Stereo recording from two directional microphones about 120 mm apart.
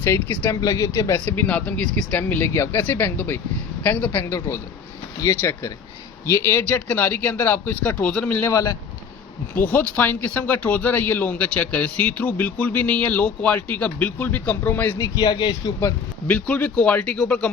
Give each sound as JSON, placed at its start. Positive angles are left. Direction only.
{"t": 0.0, "sound": "speech", "side_deg": 20}
{"t": 1.2, "sound": "speech", "side_deg": 15}
{"t": 8.4, "sound": "speech", "side_deg": 25}
{"t": 9.6, "sound": "speech", "side_deg": 15}
{"t": 14.9, "sound": "a man's voice", "side_deg": 30}
{"t": 16.2, "sound": "speech", "side_deg": 10}